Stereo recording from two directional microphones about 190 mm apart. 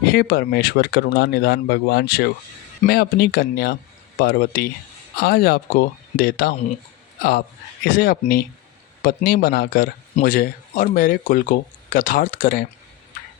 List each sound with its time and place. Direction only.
0.0 s a man's voice: 55° left (ahead or behind)